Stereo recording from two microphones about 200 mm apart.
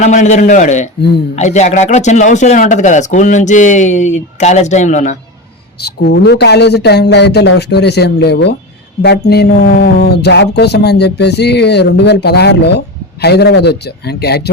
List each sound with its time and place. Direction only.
0.0 s speech: 35° left (ahead or behind)
5.8 s speech: 55° left (ahead or behind)